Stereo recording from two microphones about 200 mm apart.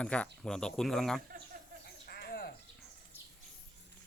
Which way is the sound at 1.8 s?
50° left (ahead or behind).